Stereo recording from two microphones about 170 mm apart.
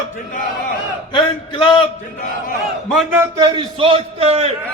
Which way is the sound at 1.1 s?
30° left (ahead or behind).